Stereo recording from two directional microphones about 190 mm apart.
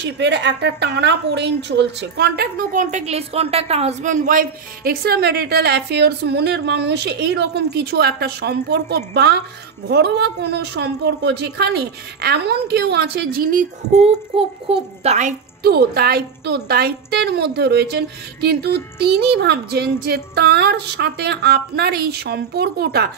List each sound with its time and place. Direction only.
0.0 s a woman's voice: 65° right (ahead or behind); by 15.3 s 40° right (ahead or behind)
15.6 s a woman's voice: 55° right (ahead or behind)